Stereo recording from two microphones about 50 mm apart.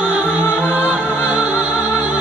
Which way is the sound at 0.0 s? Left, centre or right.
Right.